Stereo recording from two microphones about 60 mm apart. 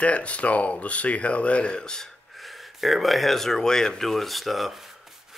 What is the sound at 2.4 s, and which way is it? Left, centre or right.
Speech, centre.